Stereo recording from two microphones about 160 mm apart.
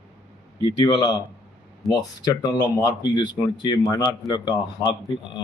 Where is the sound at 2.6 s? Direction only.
25° left (ahead or behind).